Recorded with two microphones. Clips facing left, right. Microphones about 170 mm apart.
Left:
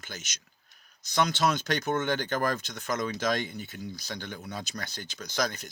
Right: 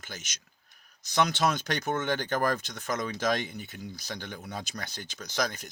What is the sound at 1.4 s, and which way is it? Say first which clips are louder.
Speech: left 1 dB; 50° right (ahead or behind).